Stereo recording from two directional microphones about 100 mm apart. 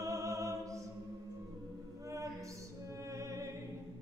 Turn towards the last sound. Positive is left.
turn(degrees=-30)  # may be behind; listen again after turning